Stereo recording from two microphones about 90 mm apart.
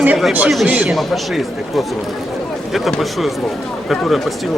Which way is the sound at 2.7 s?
Centre (ahead or behind).